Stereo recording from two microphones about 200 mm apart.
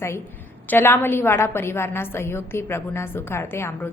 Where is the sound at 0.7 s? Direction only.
10° left (ahead or behind).